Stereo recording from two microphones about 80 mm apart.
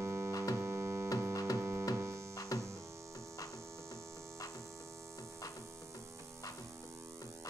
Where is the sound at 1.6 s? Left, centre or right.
Right.